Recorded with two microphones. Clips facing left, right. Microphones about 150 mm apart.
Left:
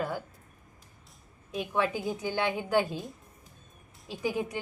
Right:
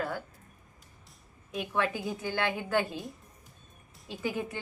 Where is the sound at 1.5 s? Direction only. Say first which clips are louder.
Left 2 dB; 15° left (ahead or behind).